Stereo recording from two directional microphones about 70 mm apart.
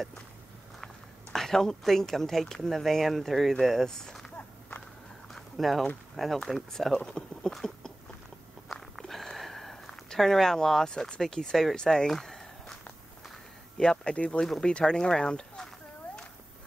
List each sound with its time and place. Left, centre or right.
1.3 s speech: centre
4.4 s walk: left
5.3 s a sound: centre
6.1 s speech: centre
8.6 s a sound: centre
14.5 s speech: centre